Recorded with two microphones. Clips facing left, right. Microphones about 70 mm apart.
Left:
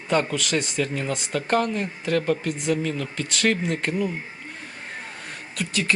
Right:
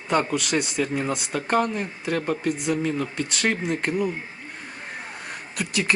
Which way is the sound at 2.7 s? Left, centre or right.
Centre.